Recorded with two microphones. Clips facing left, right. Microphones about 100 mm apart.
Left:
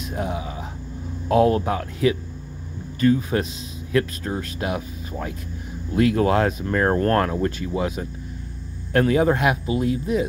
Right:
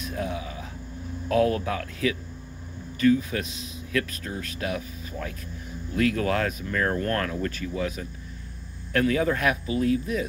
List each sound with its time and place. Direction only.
0.0 s speech: 25° left (ahead or behind)